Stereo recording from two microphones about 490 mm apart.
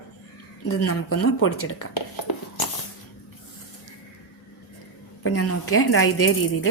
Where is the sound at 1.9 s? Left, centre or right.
Left.